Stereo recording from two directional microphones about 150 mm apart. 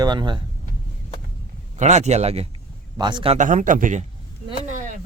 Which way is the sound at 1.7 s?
50° right (ahead or behind).